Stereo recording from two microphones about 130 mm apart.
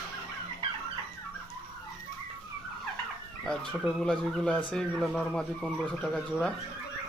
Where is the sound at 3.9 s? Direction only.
5° left (ahead or behind).